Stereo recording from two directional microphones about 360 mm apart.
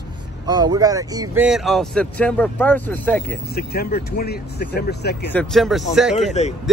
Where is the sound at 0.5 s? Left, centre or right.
Centre.